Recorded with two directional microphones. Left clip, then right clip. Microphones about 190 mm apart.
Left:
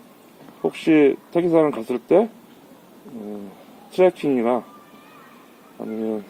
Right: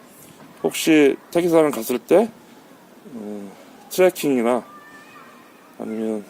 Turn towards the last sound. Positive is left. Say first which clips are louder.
# right 1 dB
turn(degrees=-20)  # may be behind; listen again after turning